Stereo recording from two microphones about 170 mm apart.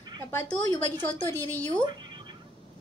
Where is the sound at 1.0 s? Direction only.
10° left (ahead or behind).